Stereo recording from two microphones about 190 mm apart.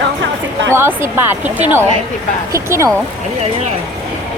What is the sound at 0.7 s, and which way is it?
Speech, 15° right (ahead or behind).